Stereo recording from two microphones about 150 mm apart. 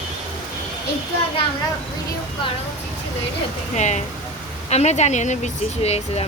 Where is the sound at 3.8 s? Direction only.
50° left (ahead or behind).